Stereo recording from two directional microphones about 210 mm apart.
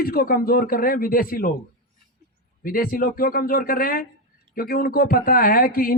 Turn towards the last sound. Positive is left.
turn(degrees=45)  # may be behind; listen again after turning